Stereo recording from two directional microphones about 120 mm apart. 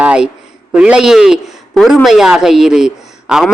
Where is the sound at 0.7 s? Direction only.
10° right (ahead or behind).